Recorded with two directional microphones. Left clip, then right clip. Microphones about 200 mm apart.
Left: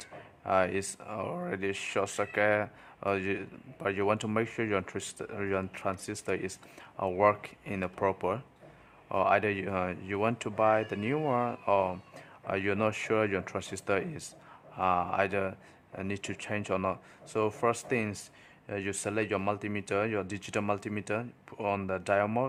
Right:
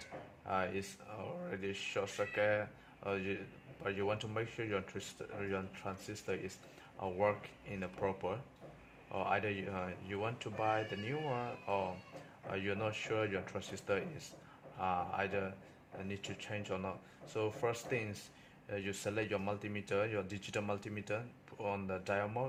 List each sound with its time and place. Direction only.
0.0 s speech: 35° left (ahead or behind)